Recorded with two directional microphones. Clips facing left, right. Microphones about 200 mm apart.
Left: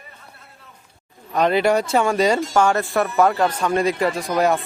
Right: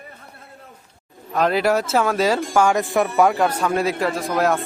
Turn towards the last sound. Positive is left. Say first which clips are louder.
# left 1 dB
turn(degrees=0)  # may be behind; listen again after turning